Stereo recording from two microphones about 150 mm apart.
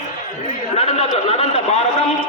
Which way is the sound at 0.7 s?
45° left (ahead or behind).